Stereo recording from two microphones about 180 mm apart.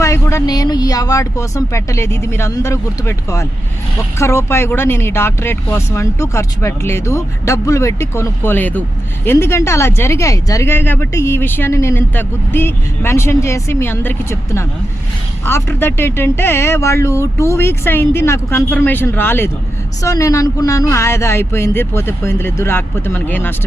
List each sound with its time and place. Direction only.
0.0 s speech: 15° left (ahead or behind)